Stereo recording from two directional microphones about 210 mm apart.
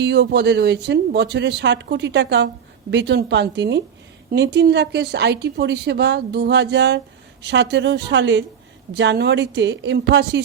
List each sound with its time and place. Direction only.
0.0 s a woman's voice: 55° right (ahead or behind)